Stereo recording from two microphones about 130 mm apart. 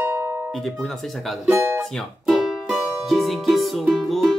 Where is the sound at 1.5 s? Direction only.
20° right (ahead or behind).